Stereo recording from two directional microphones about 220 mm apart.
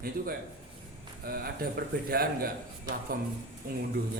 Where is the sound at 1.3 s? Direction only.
45° right (ahead or behind).